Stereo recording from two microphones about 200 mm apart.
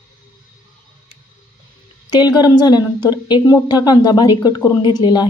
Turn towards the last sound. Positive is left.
turn(degrees=20)  # may be behind; listen again after turning